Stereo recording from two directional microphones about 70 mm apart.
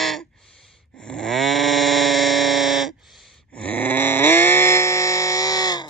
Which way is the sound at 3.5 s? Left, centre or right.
Centre.